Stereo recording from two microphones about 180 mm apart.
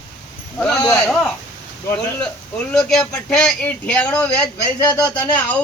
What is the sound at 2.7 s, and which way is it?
Speech, 5° left (ahead or behind).